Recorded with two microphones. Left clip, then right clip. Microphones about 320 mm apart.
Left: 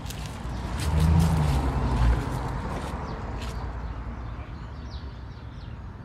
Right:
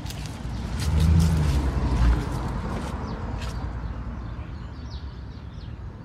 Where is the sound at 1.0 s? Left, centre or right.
Centre.